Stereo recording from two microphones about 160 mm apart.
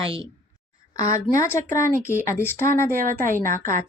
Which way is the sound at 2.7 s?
55° right (ahead or behind).